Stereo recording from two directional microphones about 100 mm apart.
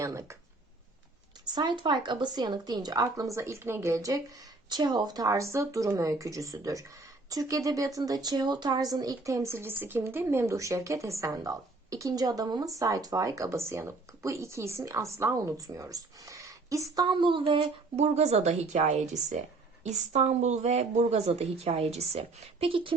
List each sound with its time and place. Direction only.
0.0 s speech: 30° right (ahead or behind)
1.5 s speech: 50° right (ahead or behind); by 4.2 s 30° right (ahead or behind)
4.7 s speech: 45° right (ahead or behind)
17.2 s a woman's voice: 55° right (ahead or behind); by 18.5 s 90° right
20.2 s a woman's voice: 90° right; by 23.0 s 65° right (ahead or behind)